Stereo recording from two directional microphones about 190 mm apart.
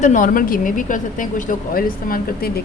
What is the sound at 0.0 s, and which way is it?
A woman's voice, 45° left (ahead or behind).